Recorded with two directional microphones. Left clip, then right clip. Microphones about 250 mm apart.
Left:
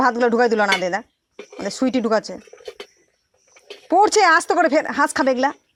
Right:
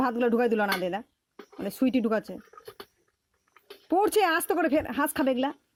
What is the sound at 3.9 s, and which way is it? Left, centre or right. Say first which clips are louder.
A woman's voice: left 10 dB; centre.